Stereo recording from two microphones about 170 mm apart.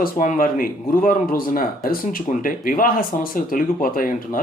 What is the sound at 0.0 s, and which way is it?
Speech, 50° left (ahead or behind).